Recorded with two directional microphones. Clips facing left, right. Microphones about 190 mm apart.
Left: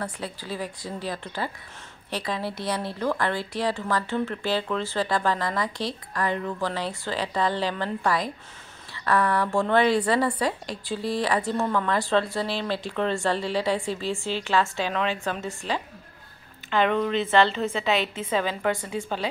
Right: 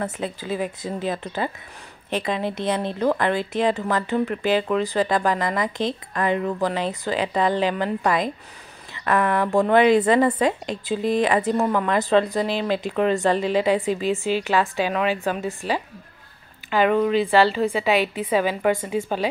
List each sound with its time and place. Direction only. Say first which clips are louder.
0.0 s a woman's voice: right 5 dB; 20° right (ahead or behind)